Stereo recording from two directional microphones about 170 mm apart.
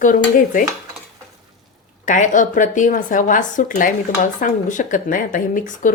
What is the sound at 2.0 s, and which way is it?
Speech, 50° left (ahead or behind).